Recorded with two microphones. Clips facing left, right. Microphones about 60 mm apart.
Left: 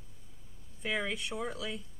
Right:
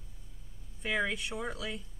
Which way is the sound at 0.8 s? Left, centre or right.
Centre.